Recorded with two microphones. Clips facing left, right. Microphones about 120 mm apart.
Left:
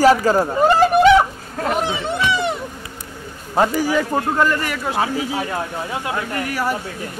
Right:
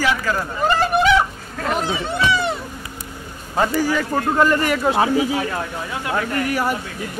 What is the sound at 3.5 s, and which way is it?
Speech, 20° left (ahead or behind).